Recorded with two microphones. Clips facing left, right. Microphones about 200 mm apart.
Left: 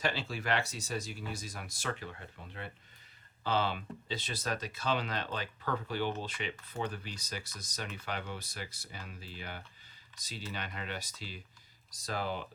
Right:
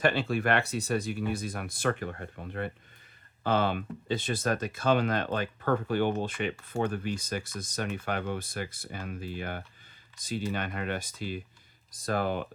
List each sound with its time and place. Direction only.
0.0 s speech: 55° right (ahead or behind)